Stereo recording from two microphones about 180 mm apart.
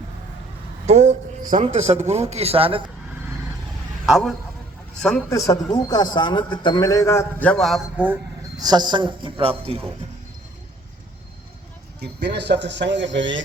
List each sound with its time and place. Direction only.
0.9 s speech: 40° right (ahead or behind)
4.0 s a man's voice: centre (ahead or behind)
5.5 s a man's voice: 20° left (ahead or behind); by 8.2 s 10° right (ahead or behind)
8.5 s speech: 20° right (ahead or behind)
11.9 s speech: 65° right (ahead or behind); by 13.4 s 85° right